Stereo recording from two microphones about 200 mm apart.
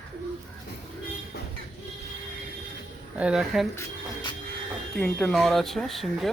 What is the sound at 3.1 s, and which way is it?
Speech, 5° right (ahead or behind).